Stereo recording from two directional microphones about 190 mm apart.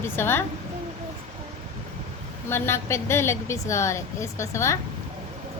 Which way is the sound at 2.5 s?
15° left (ahead or behind).